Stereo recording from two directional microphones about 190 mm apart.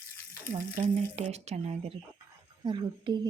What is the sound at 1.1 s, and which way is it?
Speech, 35° right (ahead or behind).